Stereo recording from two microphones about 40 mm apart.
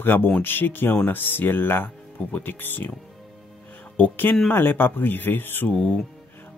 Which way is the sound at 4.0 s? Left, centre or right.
Left.